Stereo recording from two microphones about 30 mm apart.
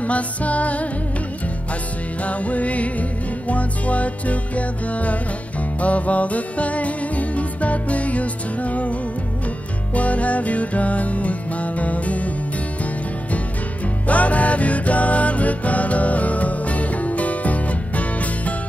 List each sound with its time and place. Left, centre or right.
0.0 s music: left
2.2 s music: left
9.9 s music: left
14.0 s music: left